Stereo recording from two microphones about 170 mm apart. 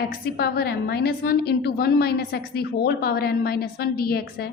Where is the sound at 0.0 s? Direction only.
65° left (ahead or behind).